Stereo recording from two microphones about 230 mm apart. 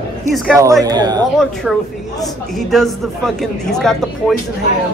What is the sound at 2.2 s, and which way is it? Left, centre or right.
A woman's voice, centre.